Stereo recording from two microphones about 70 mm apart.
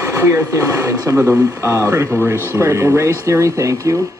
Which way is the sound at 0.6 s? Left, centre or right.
Right.